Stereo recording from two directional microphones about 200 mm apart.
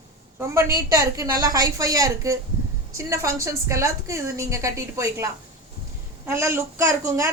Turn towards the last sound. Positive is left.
turn(degrees=-15)  # may be behind; listen again after turning